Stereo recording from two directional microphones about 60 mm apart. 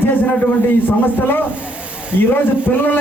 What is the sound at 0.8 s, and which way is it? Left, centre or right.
Speech, left.